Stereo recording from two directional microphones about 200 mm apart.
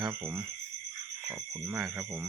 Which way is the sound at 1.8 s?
10° right (ahead or behind).